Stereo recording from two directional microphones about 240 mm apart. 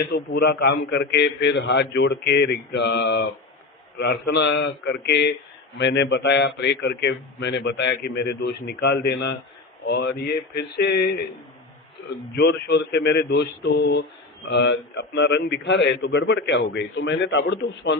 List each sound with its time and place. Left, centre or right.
0.1 s a man's voice: left
12.4 s a man's voice: left